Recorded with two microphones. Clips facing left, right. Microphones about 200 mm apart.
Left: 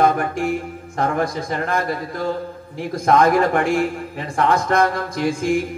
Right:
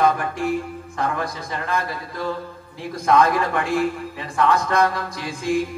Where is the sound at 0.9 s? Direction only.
45° left (ahead or behind).